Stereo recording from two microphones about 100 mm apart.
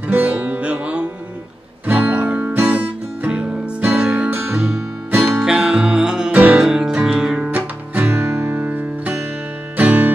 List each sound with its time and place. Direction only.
0.1 s music: 15° right (ahead or behind)